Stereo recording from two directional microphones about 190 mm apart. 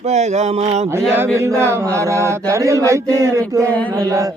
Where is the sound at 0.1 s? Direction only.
35° right (ahead or behind).